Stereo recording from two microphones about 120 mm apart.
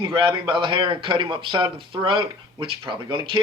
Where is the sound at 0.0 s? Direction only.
45° right (ahead or behind).